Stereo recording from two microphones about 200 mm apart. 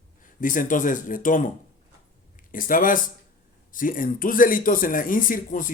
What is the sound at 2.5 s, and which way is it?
A man's voice, 45° left (ahead or behind).